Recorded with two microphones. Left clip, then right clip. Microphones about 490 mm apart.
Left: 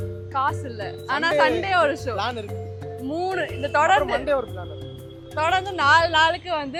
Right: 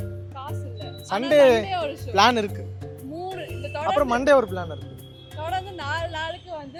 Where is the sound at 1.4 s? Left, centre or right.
Right.